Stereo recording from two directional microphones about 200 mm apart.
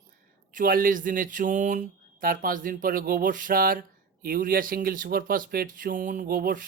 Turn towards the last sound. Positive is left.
turn(degrees=-45)  # may be behind; listen again after turning